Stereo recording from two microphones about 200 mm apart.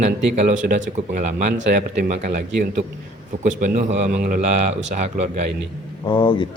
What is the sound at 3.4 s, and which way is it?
A man's voice, 40° right (ahead or behind).